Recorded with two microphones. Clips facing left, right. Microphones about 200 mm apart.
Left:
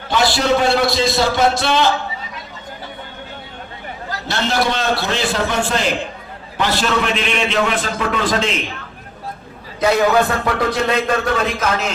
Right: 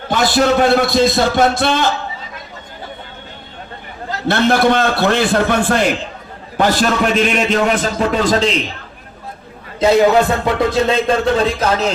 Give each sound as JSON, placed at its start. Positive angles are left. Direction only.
{"t": 0.1, "sound": "a man's voice", "side_deg": -50}
{"t": 4.3, "sound": "a man's voice", "side_deg": -55}
{"t": 9.8, "sound": "speech", "side_deg": -25}